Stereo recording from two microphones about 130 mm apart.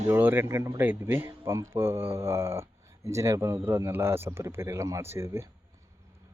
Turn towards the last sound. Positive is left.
turn(degrees=-20)  # may be behind; listen again after turning